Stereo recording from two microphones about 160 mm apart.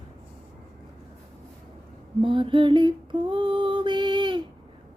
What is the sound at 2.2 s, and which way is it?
Music, 30° right (ahead or behind).